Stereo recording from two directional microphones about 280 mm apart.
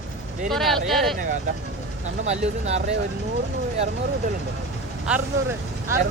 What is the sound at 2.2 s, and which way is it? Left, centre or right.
Speech, right.